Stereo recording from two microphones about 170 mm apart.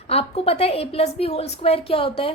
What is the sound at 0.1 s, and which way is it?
A woman's voice, 35° left (ahead or behind).